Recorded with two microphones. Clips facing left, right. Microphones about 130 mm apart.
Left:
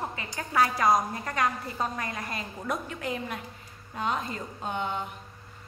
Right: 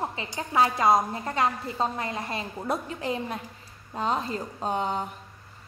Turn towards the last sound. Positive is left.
turn(degrees=-35)  # may be behind; listen again after turning